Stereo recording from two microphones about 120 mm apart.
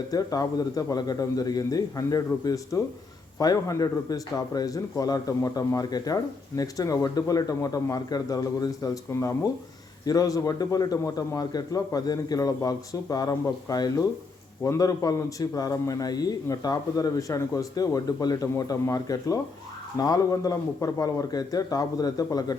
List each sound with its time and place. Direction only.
0.1 s a man's voice: 30° left (ahead or behind)